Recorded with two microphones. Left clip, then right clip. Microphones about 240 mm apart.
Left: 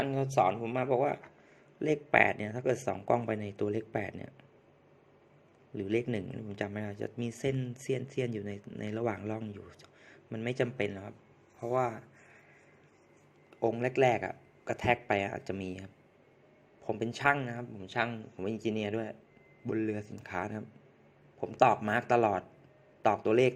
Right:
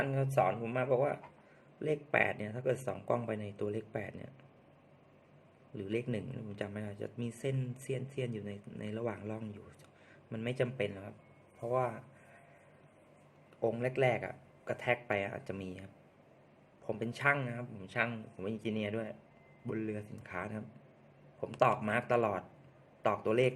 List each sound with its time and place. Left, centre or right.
0.0 s speech: centre
5.7 s speech: left
13.6 s speech: left